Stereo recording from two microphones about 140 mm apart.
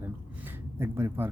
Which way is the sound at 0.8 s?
15° right (ahead or behind).